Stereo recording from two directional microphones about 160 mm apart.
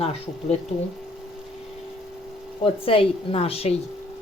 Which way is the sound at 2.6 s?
35° left (ahead or behind).